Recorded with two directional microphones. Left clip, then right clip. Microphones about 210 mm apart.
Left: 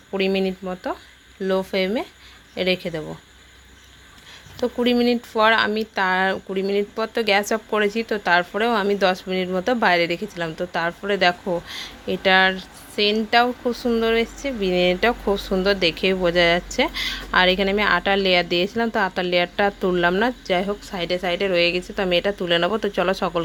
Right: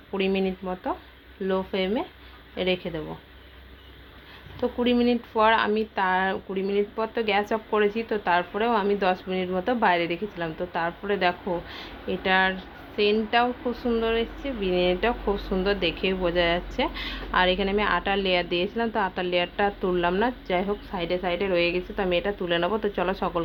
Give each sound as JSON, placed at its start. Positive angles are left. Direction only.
{"t": 0.1, "sound": "speech", "side_deg": 55}
{"t": 4.6, "sound": "speech", "side_deg": 60}